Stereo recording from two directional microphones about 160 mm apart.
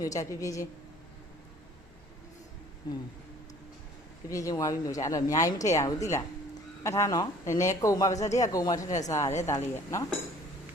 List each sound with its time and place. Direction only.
0.0 s speech: 20° left (ahead or behind)
4.3 s speech: 20° left (ahead or behind)